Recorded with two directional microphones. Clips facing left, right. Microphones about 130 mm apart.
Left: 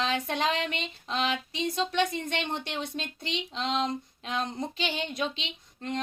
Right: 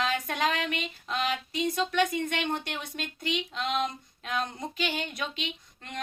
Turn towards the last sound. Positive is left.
turn(degrees=25)  # may be behind; listen again after turning